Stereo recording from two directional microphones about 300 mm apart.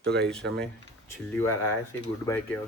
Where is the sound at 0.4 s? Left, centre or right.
Right.